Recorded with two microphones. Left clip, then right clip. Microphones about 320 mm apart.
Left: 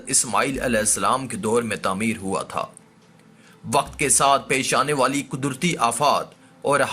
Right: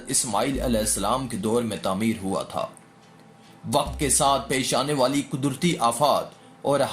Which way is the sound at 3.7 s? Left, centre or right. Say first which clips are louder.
Left 3 dB; left.